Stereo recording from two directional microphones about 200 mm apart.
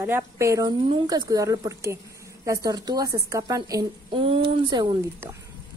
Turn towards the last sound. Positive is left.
turn(degrees=-25)  # may be behind; listen again after turning